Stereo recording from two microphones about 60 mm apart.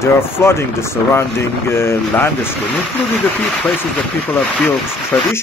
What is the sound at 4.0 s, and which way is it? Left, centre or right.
Speech, left.